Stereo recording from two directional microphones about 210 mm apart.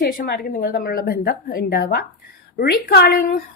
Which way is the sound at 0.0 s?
45° left (ahead or behind).